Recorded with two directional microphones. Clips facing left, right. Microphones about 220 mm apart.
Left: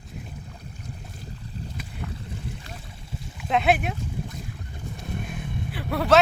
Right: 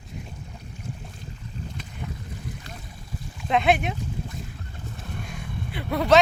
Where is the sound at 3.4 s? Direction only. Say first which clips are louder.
Right 1 dB; 5° left (ahead or behind).